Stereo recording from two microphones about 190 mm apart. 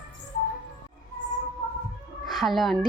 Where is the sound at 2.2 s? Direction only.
Centre (ahead or behind).